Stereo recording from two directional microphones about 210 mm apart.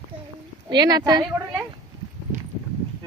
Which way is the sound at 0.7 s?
20° right (ahead or behind).